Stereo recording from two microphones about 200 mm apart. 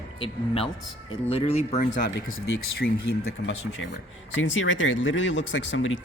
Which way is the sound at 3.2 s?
70° left (ahead or behind).